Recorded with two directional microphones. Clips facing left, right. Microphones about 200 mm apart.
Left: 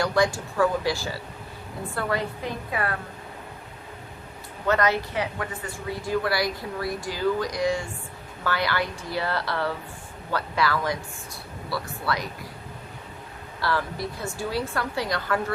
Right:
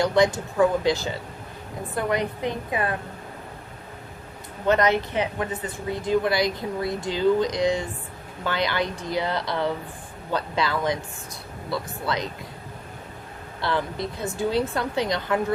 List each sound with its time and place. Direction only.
0.0 s speech: 20° right (ahead or behind)
4.6 s speech: 20° right (ahead or behind)
13.6 s speech: 20° right (ahead or behind)